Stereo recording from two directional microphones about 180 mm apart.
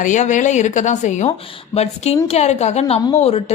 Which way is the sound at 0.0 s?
45° left (ahead or behind).